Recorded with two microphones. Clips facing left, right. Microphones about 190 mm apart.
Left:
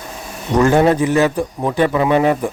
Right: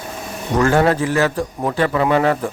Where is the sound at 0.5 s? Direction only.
20° left (ahead or behind).